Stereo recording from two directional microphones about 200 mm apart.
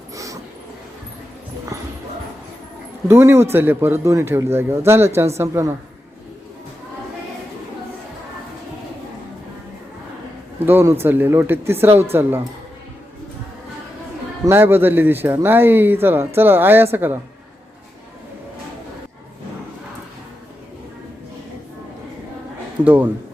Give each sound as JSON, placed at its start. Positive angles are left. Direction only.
{"t": 0.1, "sound": "train", "side_deg": -15}
{"t": 1.7, "sound": "clip-clop", "side_deg": -15}
{"t": 3.1, "sound": "speech", "side_deg": -10}
{"t": 10.7, "sound": "speech", "side_deg": -10}
{"t": 14.4, "sound": "speech", "side_deg": -10}
{"t": 22.8, "sound": "speech", "side_deg": -10}